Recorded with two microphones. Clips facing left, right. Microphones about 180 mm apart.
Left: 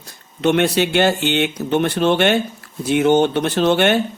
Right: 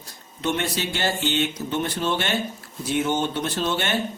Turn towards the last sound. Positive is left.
turn(degrees=65)  # may be behind; listen again after turning